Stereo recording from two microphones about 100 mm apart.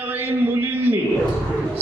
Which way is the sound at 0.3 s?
20° right (ahead or behind).